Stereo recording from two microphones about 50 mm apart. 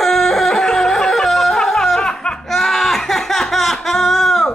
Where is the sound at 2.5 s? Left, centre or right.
Centre.